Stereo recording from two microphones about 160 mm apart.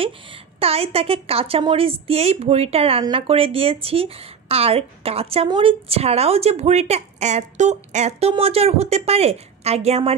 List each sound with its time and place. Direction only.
0.0 s a woman's voice: 35° right (ahead or behind)